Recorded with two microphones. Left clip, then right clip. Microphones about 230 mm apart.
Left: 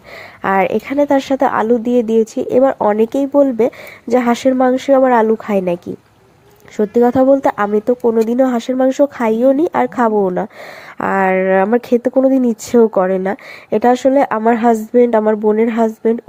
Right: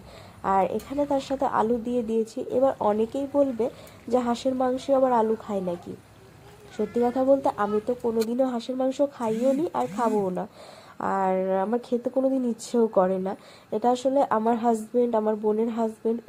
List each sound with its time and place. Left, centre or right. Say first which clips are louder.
0.4 s speech: left 9 dB; left
6.7 s speech: left 13 dB; left